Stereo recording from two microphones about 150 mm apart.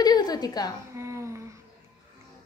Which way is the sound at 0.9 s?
20° right (ahead or behind).